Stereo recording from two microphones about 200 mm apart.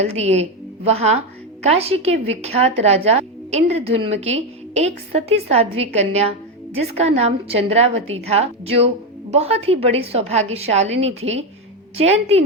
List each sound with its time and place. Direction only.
0.0 s a woman's voice: 35° right (ahead or behind)